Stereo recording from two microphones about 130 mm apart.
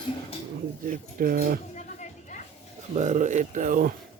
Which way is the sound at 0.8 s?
90° right.